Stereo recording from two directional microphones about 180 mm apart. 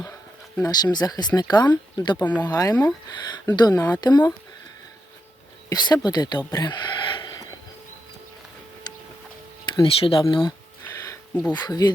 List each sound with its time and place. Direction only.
0.0 s speech: 10° left (ahead or behind)
5.6 s speech: 25° left (ahead or behind)
6.5 s a sound: 25° left (ahead or behind)
9.6 s speech: 25° left (ahead or behind)
11.0 s a sound: 15° left (ahead or behind)
11.5 s speech: 20° left (ahead or behind)